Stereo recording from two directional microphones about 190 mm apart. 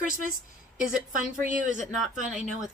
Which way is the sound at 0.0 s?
45° right (ahead or behind).